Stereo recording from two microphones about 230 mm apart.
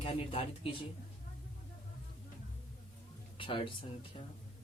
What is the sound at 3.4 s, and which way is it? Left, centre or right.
Speech, left.